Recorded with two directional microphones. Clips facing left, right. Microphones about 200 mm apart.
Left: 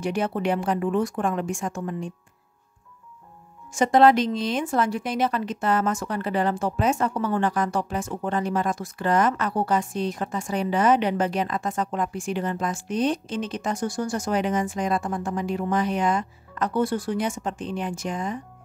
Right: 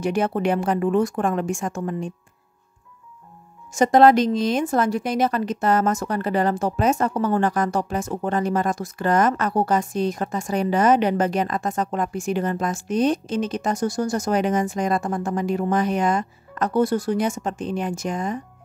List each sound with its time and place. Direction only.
0.0 s speech: 45° right (ahead or behind)
3.7 s speech: 40° right (ahead or behind)